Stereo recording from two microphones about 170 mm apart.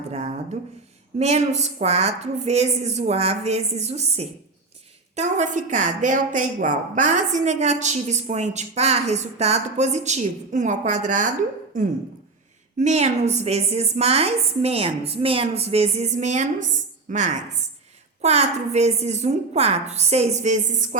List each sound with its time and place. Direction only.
0.1 s a sound: 40° right (ahead or behind)
1.2 s a woman's voice: 40° right (ahead or behind)
12.8 s a woman's voice: 40° right (ahead or behind)